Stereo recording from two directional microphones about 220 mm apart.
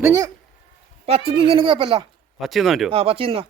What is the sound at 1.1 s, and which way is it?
Speech, 25° right (ahead or behind).